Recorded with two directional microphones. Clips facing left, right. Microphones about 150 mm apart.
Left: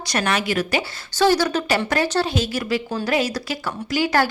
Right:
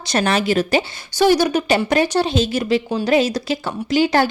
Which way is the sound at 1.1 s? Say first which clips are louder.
Right 3 dB; 15° right (ahead or behind).